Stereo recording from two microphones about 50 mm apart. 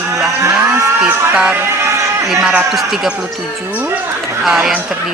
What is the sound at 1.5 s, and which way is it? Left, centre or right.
Music, right.